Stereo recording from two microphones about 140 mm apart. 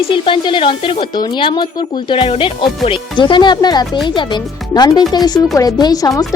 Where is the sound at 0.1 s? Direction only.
35° left (ahead or behind).